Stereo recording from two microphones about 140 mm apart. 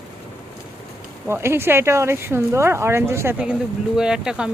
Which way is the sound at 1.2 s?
15° right (ahead or behind).